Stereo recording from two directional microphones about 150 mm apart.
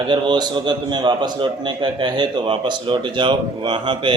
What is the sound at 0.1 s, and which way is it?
A man's voice, 30° right (ahead or behind).